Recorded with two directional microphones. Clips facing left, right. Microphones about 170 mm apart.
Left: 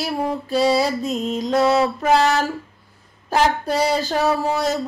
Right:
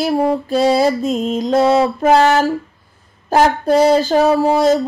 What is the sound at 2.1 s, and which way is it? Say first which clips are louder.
Female singing: right 6 dB; 45° right (ahead or behind).